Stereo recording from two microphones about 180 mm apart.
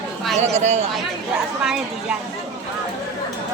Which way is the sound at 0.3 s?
40° right (ahead or behind).